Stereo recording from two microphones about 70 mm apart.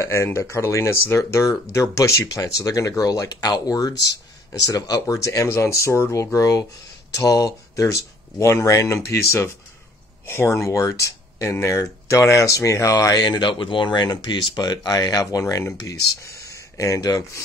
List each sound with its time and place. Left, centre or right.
0.0 s speech: left